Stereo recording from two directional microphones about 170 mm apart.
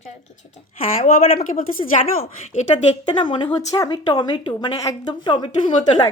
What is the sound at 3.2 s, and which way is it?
Speech, 25° left (ahead or behind).